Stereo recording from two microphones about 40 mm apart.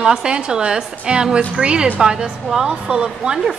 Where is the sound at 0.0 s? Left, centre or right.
Centre.